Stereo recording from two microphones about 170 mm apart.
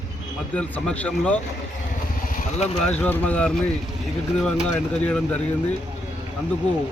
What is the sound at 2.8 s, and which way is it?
Speech, 10° left (ahead or behind).